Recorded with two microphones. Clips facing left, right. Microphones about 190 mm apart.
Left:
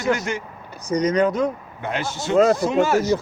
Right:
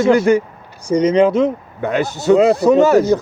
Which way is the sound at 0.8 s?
30° right (ahead or behind).